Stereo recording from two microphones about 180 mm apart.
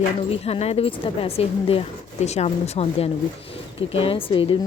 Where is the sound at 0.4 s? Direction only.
35° left (ahead or behind).